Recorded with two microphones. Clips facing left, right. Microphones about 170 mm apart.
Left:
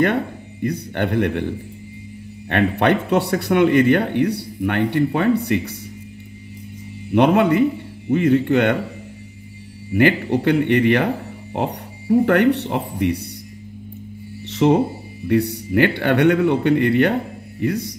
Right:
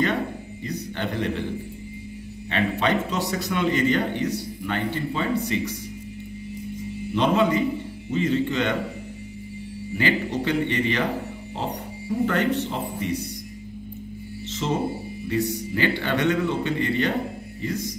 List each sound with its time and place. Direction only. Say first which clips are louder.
0.0 s speech: left 5 dB; 60° left (ahead or behind)
2.5 s speech: left 6 dB; 60° left (ahead or behind)
7.2 s speech: left 6 dB; 60° left (ahead or behind)
9.9 s speech: left 8 dB; 60° left (ahead or behind)
14.5 s music: left 11 dB; 65° left (ahead or behind)
15.2 s speech: left 7 dB; 65° left (ahead or behind)